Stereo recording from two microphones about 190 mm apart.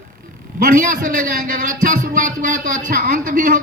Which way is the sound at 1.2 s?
45° right (ahead or behind).